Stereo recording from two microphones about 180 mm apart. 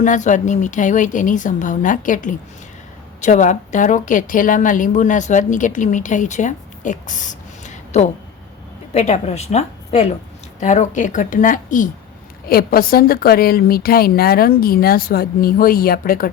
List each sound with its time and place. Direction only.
0.0 s a woman's voice: 45° left (ahead or behind)